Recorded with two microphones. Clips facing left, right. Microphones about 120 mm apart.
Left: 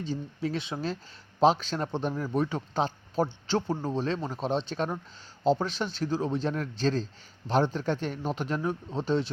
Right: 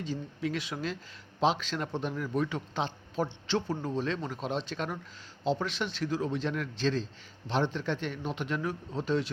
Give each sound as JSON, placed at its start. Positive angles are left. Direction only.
{"t": 0.0, "sound": "a man's voice", "side_deg": 30}